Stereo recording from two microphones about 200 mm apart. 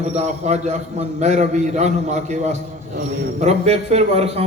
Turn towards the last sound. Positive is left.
turn(degrees=-30)  # may be behind; listen again after turning